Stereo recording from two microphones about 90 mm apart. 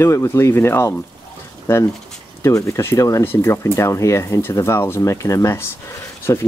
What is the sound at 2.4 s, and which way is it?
Speech, 35° left (ahead or behind).